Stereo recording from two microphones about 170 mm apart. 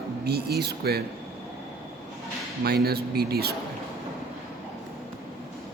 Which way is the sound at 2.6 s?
65° right (ahead or behind).